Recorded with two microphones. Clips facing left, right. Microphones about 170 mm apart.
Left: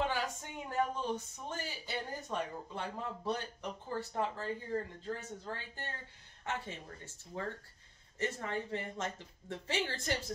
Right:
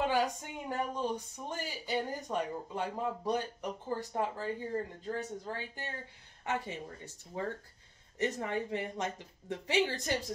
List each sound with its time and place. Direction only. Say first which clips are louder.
0.3 s speech: right 3 dB; 15° right (ahead or behind)